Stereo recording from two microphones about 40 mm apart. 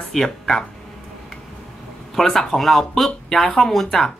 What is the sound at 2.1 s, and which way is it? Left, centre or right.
Speech, centre.